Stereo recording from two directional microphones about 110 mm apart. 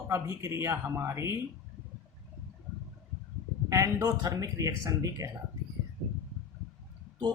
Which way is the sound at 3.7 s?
30° right (ahead or behind).